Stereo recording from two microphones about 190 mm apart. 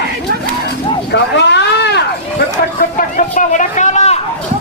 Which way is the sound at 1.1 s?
65° left (ahead or behind).